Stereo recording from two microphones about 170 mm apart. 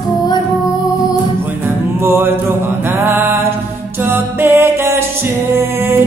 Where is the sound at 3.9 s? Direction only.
10° right (ahead or behind).